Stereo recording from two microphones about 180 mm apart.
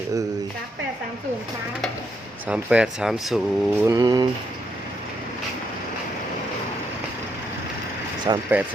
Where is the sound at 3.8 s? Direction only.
20° right (ahead or behind).